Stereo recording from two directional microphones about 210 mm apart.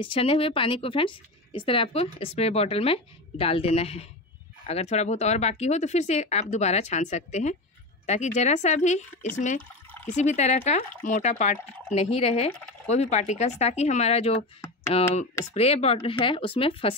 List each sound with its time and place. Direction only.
0.0 s a woman's voice: 25° left (ahead or behind)